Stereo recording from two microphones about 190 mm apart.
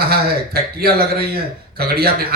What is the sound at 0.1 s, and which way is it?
A man's voice, 55° right (ahead or behind).